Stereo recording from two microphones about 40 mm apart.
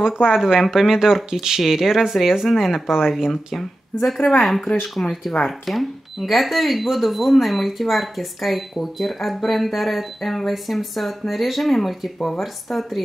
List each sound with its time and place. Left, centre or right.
0.0 s speech: centre
3.5 s speech: centre
5.0 s speech: left
5.5 s speech: centre